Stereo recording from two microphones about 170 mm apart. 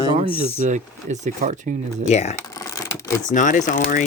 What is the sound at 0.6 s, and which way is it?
Speech, 45° right (ahead or behind).